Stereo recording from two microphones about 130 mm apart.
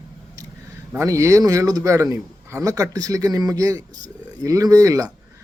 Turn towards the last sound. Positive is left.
turn(degrees=-25)  # may be behind; listen again after turning